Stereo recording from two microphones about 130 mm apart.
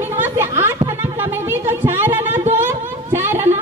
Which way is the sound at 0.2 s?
20° right (ahead or behind).